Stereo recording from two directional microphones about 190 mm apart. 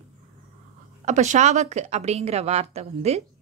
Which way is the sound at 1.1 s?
40° right (ahead or behind).